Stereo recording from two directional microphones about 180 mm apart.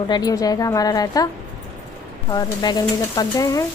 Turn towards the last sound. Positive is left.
turn(degrees=15)  # may be behind; listen again after turning